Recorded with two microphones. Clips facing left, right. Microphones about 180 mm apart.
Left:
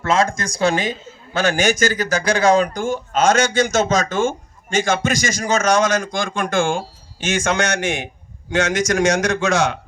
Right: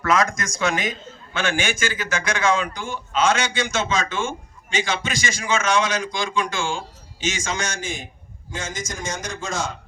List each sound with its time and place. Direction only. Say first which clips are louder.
0.0 s a man's voice: left 3 dB; 30° left (ahead or behind); by 9.7 s 75° left (ahead or behind)